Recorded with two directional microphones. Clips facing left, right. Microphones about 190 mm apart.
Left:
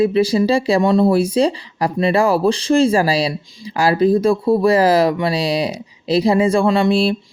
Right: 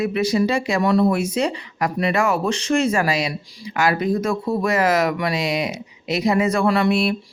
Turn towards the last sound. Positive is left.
turn(degrees=30)  # may be behind; listen again after turning